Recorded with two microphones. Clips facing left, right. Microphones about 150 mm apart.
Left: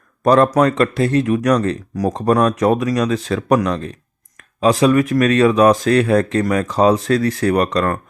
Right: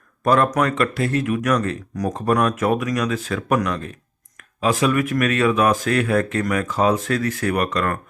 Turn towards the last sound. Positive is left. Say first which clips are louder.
# left 5 dB
turn(degrees=30)  # may be behind; listen again after turning